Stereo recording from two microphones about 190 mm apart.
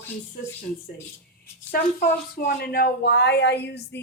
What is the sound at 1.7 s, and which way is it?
Speech, 55° left (ahead or behind).